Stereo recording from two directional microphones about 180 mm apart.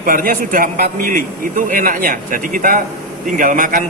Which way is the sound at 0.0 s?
50° right (ahead or behind).